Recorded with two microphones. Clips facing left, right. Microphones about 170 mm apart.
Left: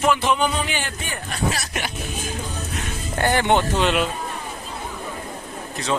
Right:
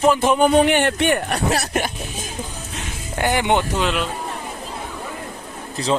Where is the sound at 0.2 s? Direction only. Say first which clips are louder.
Right 7 dB; 50° right (ahead or behind); by 1.8 s 65° right (ahead or behind).